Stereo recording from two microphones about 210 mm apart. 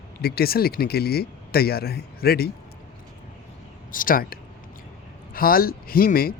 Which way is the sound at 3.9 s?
40° left (ahead or behind).